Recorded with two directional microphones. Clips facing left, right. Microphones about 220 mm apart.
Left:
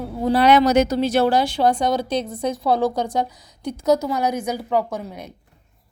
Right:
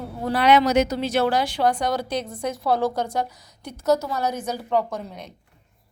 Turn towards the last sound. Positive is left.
turn(degrees=5)  # may be behind; listen again after turning